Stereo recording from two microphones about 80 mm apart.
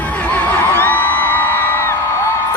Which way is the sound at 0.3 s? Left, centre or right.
Centre.